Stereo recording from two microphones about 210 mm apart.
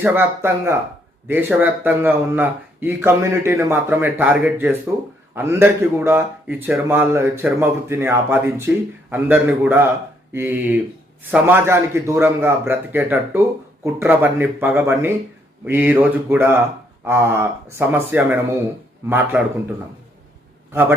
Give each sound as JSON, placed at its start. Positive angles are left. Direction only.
{"t": 0.0, "sound": "speech", "side_deg": -10}